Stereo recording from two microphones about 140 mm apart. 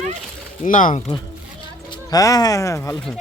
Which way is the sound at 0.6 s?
70° left (ahead or behind).